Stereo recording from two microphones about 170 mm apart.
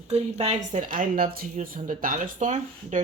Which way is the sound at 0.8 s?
55° right (ahead or behind).